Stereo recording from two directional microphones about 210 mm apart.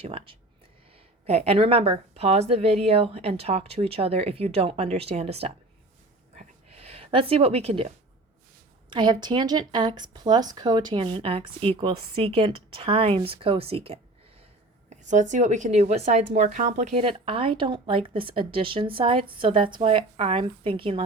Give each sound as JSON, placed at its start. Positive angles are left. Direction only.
{"t": 0.0, "sound": "a woman's voice", "side_deg": -25}
{"t": 6.3, "sound": "a sound", "side_deg": -30}
{"t": 8.9, "sound": "a woman's voice", "side_deg": -20}